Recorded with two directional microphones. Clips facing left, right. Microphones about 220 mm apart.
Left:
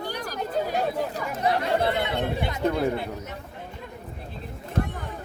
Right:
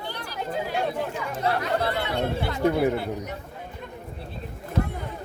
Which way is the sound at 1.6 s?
20° left (ahead or behind).